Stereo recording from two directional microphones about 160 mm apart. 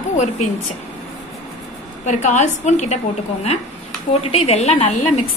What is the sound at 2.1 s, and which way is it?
A woman's voice, 45° left (ahead or behind).